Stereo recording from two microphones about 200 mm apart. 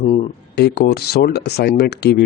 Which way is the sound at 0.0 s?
35° left (ahead or behind).